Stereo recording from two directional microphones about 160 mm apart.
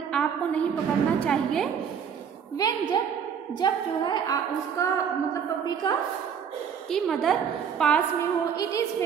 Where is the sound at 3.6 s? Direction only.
25° left (ahead or behind).